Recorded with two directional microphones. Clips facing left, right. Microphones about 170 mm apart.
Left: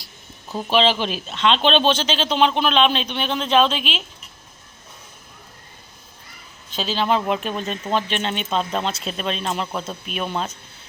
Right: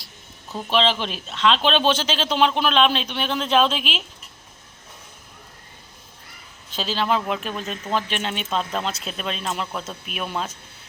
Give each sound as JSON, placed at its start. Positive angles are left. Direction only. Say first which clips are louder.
{"t": 0.5, "sound": "speech", "louder": "left 3 dB", "side_deg": 5}
{"t": 6.7, "sound": "speech", "louder": "left 2 dB", "side_deg": -5}
{"t": 7.9, "sound": "speech", "louder": "left 2 dB", "side_deg": 30}
{"t": 8.1, "sound": "speech", "louder": "left 2 dB", "side_deg": -5}